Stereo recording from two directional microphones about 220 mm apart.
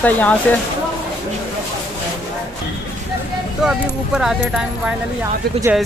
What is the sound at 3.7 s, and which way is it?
Speech, centre (ahead or behind).